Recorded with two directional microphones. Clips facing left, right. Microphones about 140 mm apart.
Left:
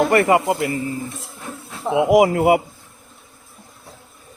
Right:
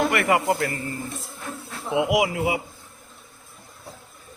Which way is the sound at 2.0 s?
45° left (ahead or behind).